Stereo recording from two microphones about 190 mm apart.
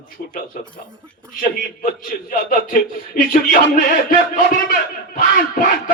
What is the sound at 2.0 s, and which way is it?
Speech, 45° left (ahead or behind).